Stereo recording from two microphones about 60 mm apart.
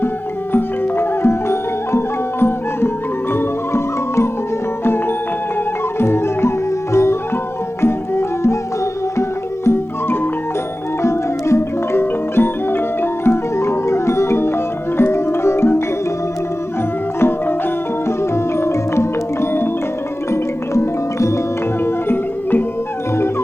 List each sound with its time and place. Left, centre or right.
0.5 s music: left
9.6 s music: left
17.2 s music: left
20.3 s music: left
21.8 s music: left